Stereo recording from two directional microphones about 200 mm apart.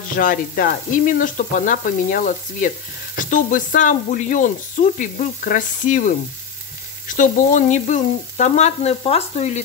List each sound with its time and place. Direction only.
0.2 s speech: 40° left (ahead or behind)
7.2 s speech: 40° left (ahead or behind)